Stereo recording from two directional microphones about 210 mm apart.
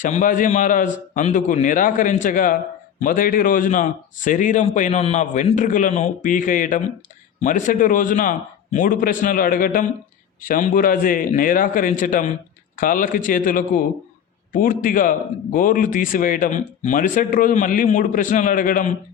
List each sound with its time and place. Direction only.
0.0 s a man's voice: 40° left (ahead or behind)